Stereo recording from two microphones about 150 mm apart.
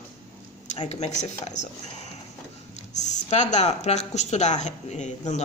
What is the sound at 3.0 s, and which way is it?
A woman's voice, 50° left (ahead or behind).